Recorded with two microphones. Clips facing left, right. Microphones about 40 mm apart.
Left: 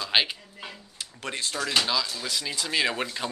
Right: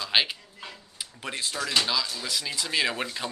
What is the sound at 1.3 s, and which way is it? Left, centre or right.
Speech, centre.